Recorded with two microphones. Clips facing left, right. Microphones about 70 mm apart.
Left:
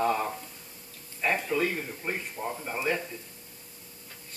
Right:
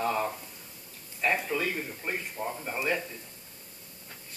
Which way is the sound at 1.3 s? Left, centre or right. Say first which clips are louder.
Left 2 dB; centre.